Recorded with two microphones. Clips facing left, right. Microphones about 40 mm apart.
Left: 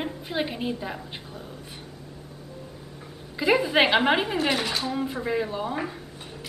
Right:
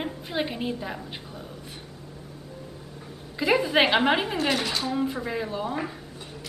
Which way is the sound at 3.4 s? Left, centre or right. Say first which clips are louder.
Left 1 dB; centre.